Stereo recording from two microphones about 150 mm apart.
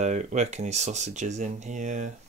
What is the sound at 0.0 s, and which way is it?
Speech, 50° right (ahead or behind).